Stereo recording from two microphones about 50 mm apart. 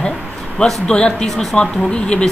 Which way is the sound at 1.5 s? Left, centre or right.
Centre.